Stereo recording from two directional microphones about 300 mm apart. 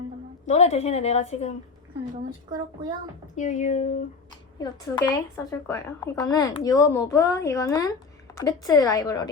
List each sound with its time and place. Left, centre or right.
0.4 s a woman's voice: left
3.3 s a woman's voice: left
4.5 s speech: centre